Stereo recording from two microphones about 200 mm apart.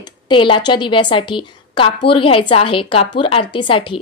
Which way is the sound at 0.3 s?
25° left (ahead or behind).